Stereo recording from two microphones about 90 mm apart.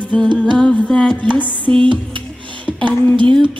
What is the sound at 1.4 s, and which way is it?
Music, 70° right (ahead or behind).